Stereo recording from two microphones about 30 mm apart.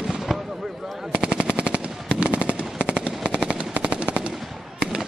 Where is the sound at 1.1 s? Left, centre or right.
Right.